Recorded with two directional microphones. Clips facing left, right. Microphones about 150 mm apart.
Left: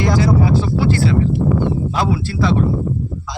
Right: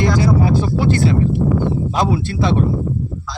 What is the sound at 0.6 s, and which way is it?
Speech, 20° right (ahead or behind).